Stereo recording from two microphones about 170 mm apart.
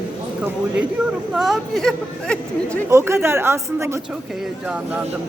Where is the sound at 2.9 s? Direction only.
15° right (ahead or behind).